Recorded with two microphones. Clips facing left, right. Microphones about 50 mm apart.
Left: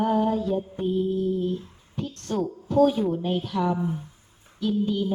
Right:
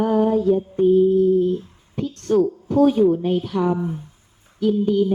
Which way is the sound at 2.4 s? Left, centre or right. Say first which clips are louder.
Right 3 dB; right.